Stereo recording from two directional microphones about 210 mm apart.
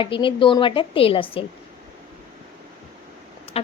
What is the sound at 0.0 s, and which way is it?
A woman's voice, 25° left (ahead or behind).